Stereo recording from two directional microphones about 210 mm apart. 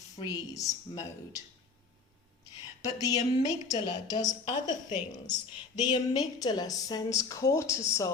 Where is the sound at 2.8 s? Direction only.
15° left (ahead or behind).